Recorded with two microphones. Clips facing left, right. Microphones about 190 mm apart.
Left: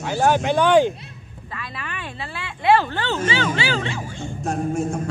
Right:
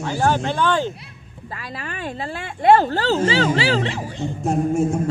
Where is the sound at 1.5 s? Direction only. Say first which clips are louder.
Right 2 dB; 40° right (ahead or behind).